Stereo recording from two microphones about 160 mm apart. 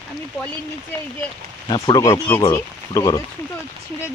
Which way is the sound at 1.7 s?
25° left (ahead or behind).